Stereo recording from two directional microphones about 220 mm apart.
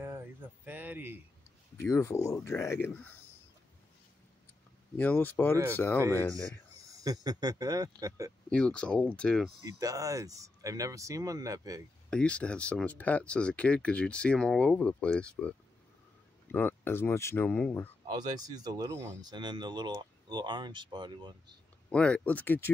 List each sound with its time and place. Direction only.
0.7 s a sound: 10° right (ahead or behind)
1.8 s speech: 10° left (ahead or behind)
4.9 s speech: 5° left (ahead or behind)
7.0 s speech: 15° right (ahead or behind)
8.5 s speech: 5° left (ahead or behind)
9.7 s speech: 15° right (ahead or behind)
12.1 s speech: 5° left (ahead or behind)
16.5 s speech: 10° left (ahead or behind)
18.0 s speech: 20° right (ahead or behind)
21.9 s speech: 5° left (ahead or behind)